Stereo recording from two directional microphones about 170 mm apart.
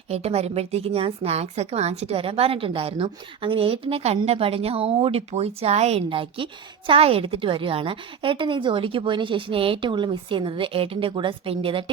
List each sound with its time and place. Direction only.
0.1 s a woman's voice: 40° right (ahead or behind)